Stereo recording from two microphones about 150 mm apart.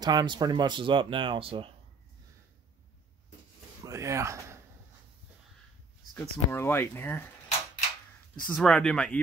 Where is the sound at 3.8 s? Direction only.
20° right (ahead or behind).